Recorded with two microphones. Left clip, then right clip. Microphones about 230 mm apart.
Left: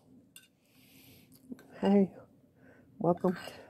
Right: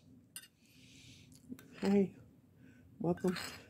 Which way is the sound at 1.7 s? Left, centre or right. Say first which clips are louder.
Left 5 dB; left.